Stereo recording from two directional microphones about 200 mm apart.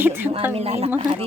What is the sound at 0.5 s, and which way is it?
Speech, 30° right (ahead or behind).